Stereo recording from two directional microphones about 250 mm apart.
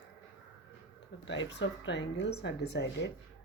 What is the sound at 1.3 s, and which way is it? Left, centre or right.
Speech, left.